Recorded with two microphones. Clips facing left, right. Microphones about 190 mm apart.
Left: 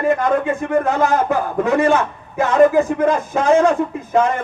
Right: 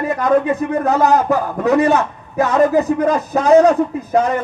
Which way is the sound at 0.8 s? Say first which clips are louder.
Right 3 dB; 40° right (ahead or behind).